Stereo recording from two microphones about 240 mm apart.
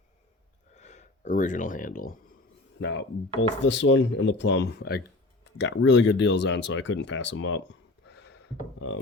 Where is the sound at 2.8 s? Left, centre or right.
Left.